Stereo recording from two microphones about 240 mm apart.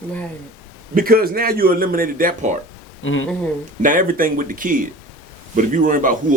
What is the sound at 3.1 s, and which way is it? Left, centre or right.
Speech, left.